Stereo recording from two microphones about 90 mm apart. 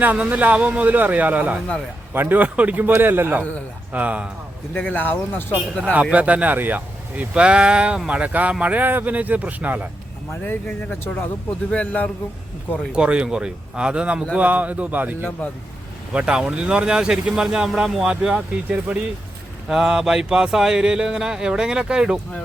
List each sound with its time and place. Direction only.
0.0 s speech: 20° right (ahead or behind)
4.7 s speech: 15° left (ahead or behind)
5.9 s speech: 15° right (ahead or behind)
10.4 s a man's voice: 15° left (ahead or behind)
12.9 s speech: 10° right (ahead or behind)